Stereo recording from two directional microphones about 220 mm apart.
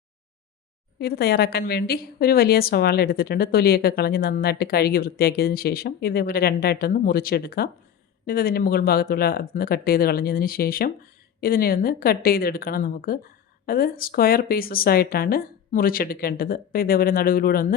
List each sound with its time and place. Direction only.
0.9 s a woman's voice: 45° left (ahead or behind)